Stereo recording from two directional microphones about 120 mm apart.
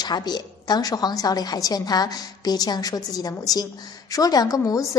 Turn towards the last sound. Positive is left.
turn(degrees=30)  # may be behind; listen again after turning